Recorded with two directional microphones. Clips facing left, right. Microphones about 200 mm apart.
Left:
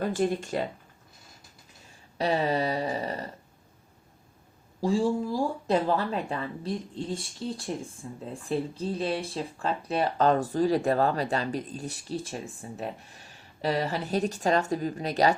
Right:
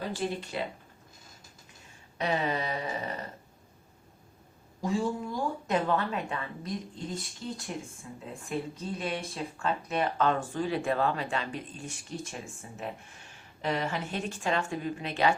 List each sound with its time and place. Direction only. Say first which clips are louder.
0.0 s speech: left 6 dB; 50° left (ahead or behind)
2.1 s speech: left 4 dB; 35° left (ahead or behind)
4.8 s speech: left 5 dB; 30° left (ahead or behind)